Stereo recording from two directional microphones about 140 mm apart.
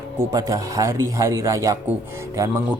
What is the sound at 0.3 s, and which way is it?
Speech, 30° right (ahead or behind).